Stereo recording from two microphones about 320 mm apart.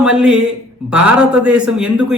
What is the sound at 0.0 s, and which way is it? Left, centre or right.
A man's voice, centre.